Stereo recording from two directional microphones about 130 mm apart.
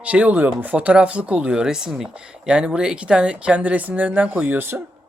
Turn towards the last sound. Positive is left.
turn(degrees=-15)  # may be behind; listen again after turning